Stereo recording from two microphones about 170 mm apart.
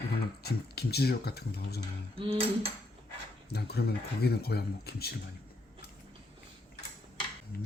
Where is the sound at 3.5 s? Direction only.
70° left (ahead or behind).